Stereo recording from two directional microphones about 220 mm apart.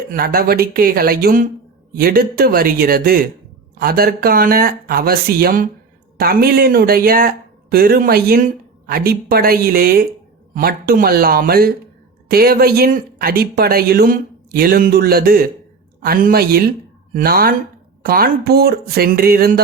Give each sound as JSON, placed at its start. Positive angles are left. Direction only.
{"t": 0.1, "sound": "speech", "side_deg": -40}